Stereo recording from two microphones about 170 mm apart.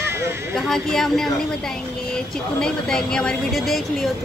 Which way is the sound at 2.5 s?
5° left (ahead or behind).